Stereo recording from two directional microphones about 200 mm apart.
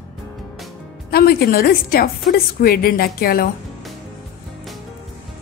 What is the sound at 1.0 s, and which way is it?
A woman's voice, 50° left (ahead or behind).